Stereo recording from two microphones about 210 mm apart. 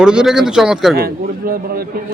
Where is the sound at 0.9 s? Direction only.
45° right (ahead or behind).